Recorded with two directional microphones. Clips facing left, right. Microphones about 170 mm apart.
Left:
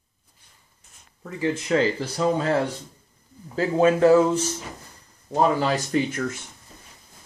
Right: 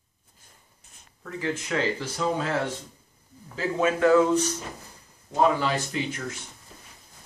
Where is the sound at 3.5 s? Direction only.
35° left (ahead or behind).